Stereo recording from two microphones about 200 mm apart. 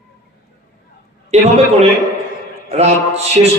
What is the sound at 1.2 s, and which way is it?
A man's voice, 30° right (ahead or behind).